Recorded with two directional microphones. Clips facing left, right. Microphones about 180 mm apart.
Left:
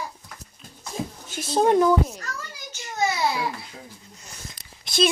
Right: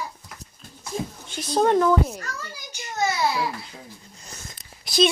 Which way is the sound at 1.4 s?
10° left (ahead or behind).